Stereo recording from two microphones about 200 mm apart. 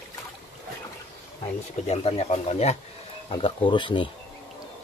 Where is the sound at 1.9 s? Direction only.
30° left (ahead or behind).